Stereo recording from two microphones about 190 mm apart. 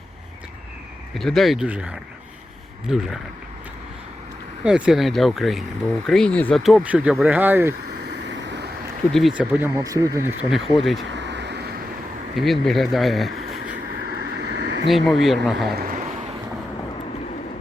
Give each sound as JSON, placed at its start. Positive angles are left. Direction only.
{"t": 1.1, "sound": "speech", "side_deg": 0}
{"t": 4.6, "sound": "speech", "side_deg": -5}
{"t": 8.0, "sound": "vehicle", "side_deg": -65}
{"t": 9.1, "sound": "speech", "side_deg": 0}
{"t": 10.5, "sound": "speech", "side_deg": 0}
{"t": 11.1, "sound": "a sound", "side_deg": -65}
{"t": 12.4, "sound": "speech", "side_deg": 0}
{"t": 14.2, "sound": "vehicle", "side_deg": -60}
{"t": 14.8, "sound": "speech", "side_deg": 0}
{"t": 15.7, "sound": "a sound", "side_deg": -45}